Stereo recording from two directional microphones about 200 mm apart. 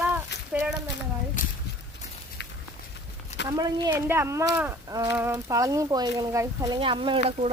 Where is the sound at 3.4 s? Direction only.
20° right (ahead or behind).